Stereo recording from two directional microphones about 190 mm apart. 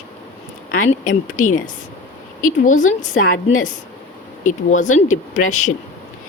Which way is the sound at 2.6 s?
40° left (ahead or behind).